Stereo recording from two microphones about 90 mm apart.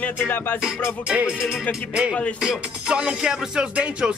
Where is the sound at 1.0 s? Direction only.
10° right (ahead or behind).